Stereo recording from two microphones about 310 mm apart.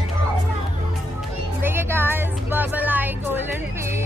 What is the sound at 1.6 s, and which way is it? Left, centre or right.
Music, centre.